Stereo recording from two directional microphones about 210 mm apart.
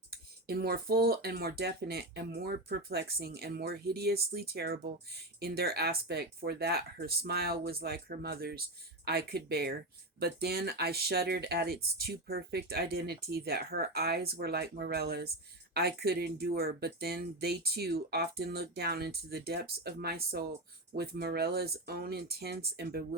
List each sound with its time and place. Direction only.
0.1 s speech: 45° right (ahead or behind)